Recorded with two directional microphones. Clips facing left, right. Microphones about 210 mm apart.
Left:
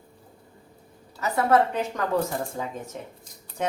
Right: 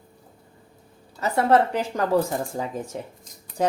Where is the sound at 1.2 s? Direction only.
30° right (ahead or behind).